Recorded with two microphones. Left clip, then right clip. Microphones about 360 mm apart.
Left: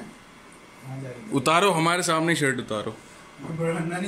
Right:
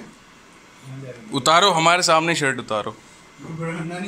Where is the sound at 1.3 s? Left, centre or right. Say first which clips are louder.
Right 5 dB; centre.